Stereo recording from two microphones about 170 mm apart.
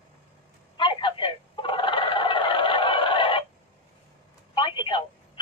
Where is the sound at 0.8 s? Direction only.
30° left (ahead or behind).